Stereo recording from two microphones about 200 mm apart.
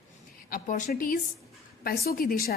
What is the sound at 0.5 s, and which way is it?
A woman's voice, 40° left (ahead or behind).